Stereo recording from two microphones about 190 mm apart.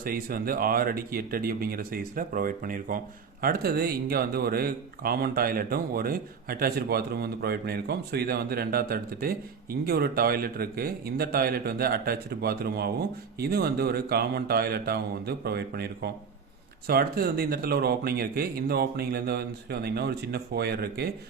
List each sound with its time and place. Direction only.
0.0 s speech: 50° right (ahead or behind)